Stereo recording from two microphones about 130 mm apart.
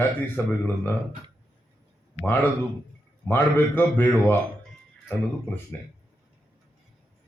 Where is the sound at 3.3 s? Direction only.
15° left (ahead or behind).